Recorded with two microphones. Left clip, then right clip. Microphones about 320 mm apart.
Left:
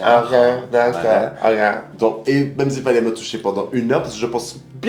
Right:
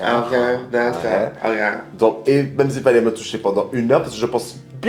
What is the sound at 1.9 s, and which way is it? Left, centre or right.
Speech, right.